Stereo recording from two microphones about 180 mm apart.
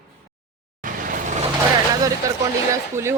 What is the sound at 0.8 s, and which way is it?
Vehicle, 50° right (ahead or behind).